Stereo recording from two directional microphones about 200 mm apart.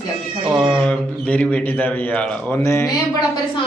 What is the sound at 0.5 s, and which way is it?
A man's voice, centre (ahead or behind).